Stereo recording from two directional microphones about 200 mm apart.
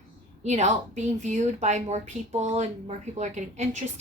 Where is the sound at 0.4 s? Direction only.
35° right (ahead or behind).